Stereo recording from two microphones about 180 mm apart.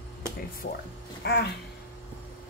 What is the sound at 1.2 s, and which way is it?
Speech, 65° left (ahead or behind).